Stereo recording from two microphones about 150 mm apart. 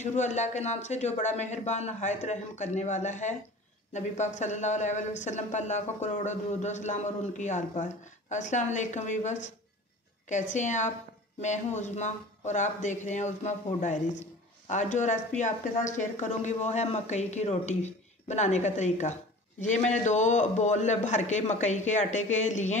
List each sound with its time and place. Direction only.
0.0 s speech: 50° left (ahead or behind)